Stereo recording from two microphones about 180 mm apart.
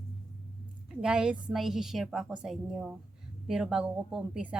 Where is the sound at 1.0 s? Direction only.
5° right (ahead or behind).